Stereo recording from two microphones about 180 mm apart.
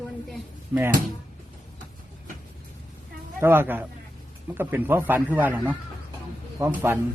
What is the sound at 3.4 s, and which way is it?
A man's voice, 10° right (ahead or behind).